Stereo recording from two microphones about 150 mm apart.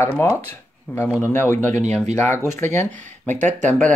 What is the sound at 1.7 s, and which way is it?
Speech, 50° right (ahead or behind).